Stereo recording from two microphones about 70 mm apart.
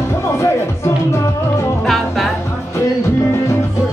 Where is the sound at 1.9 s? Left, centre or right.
Centre.